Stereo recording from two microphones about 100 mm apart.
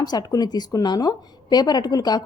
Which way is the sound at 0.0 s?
40° left (ahead or behind).